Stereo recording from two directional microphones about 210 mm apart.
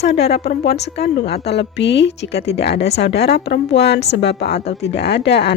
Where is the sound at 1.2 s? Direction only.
50° left (ahead or behind).